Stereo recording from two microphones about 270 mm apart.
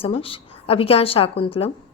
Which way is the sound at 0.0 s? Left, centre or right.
Left.